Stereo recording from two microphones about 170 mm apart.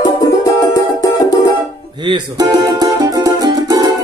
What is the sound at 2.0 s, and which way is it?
Music, 25° right (ahead or behind).